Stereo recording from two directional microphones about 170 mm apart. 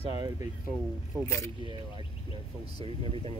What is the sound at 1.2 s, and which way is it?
Speech, 15° left (ahead or behind).